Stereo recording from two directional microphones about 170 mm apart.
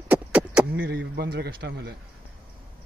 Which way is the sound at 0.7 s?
65° right (ahead or behind).